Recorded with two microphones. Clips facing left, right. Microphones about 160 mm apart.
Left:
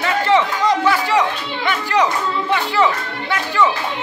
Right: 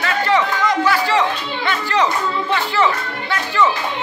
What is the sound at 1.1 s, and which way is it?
Speech, 15° left (ahead or behind).